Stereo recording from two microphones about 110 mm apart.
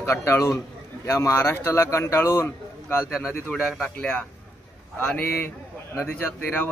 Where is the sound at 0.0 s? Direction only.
25° left (ahead or behind).